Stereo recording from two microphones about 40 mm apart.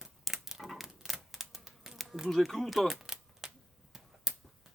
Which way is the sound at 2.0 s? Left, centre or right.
Centre.